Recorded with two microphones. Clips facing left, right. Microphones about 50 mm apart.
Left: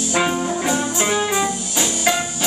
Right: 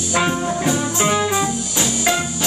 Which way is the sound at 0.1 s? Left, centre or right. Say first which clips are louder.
Right 1 dB; centre.